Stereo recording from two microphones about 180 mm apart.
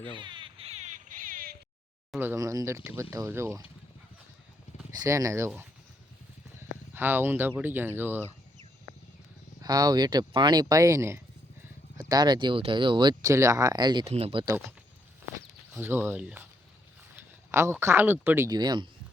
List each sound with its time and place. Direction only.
0.0 s frog: 25° right (ahead or behind); by 1.5 s 50° right (ahead or behind)
2.1 s speech: 15° right (ahead or behind)
4.9 s speech: 15° right (ahead or behind)
6.6 s speech: 10° right (ahead or behind)
9.6 s speech: 20° right (ahead or behind)
15.7 s speech: 10° right (ahead or behind)